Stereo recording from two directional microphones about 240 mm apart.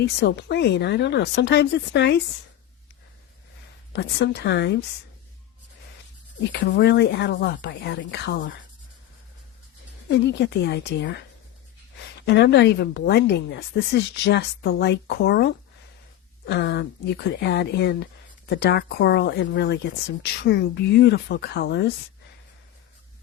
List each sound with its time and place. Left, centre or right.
0.0 s speech: left
3.9 s speech: left
6.5 s speech: left
10.1 s speech: left